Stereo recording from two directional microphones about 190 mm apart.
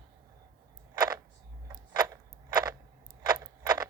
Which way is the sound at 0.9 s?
15° right (ahead or behind).